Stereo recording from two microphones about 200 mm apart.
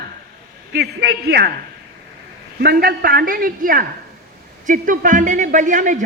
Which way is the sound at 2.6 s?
50° right (ahead or behind).